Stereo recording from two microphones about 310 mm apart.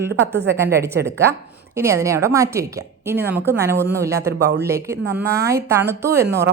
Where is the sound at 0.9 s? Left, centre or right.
Right.